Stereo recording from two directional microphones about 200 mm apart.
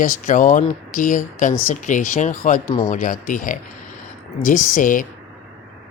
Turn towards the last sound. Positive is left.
turn(degrees=40)  # may be behind; listen again after turning